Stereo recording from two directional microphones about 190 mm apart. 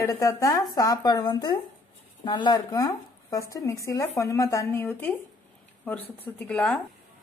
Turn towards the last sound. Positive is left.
turn(degrees=5)  # may be behind; listen again after turning